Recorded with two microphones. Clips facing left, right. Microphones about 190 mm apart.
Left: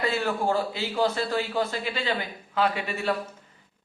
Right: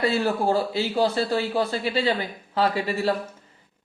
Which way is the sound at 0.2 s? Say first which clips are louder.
Right 3 dB; 35° right (ahead or behind).